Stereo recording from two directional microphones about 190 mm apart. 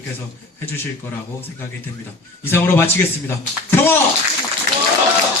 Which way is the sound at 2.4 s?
15° left (ahead or behind).